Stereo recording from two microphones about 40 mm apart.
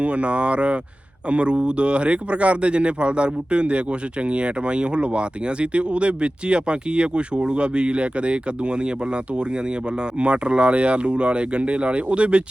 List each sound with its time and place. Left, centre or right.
0.0 s speech: right